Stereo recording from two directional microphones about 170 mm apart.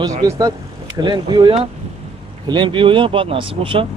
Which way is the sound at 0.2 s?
20° right (ahead or behind).